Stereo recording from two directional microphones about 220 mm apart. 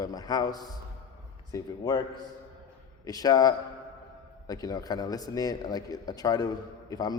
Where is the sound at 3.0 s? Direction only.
15° left (ahead or behind).